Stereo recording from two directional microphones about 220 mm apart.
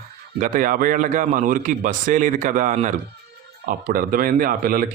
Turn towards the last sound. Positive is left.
turn(degrees=-40)  # may be behind; listen again after turning